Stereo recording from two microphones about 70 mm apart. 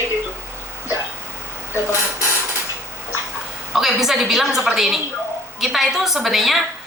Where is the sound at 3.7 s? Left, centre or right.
Centre.